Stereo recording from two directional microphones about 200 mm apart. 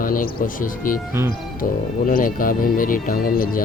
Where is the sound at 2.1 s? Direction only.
45° left (ahead or behind).